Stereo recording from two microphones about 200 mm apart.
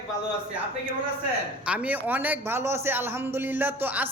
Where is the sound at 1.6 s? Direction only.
5° right (ahead or behind).